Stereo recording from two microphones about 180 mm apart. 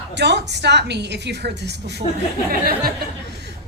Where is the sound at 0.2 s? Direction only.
70° right (ahead or behind).